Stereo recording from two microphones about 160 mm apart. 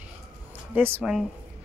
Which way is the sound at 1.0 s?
5° right (ahead or behind).